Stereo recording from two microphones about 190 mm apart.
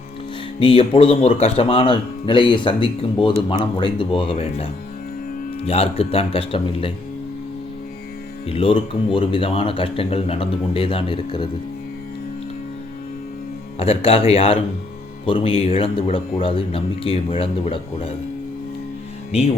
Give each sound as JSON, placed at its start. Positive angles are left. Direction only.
{"t": 0.6, "sound": "speech", "side_deg": 30}
{"t": 8.4, "sound": "speech", "side_deg": 30}
{"t": 13.7, "sound": "speech", "side_deg": 30}
{"t": 19.3, "sound": "speech", "side_deg": 35}